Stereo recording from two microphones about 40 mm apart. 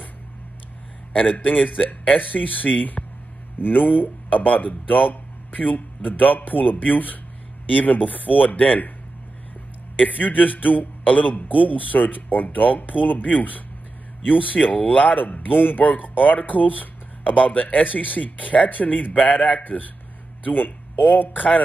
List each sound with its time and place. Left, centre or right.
1.2 s speech: left
9.9 s speech: left